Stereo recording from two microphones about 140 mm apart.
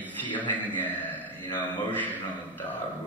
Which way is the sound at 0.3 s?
10° left (ahead or behind).